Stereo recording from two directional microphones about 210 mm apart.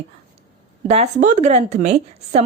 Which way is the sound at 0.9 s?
30° right (ahead or behind).